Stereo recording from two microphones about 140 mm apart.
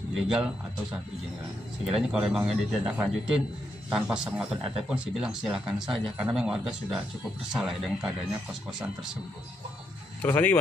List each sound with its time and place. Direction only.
0.1 s speech: 5° right (ahead or behind)
1.9 s speech: 5° right (ahead or behind)
10.2 s speech: 15° left (ahead or behind)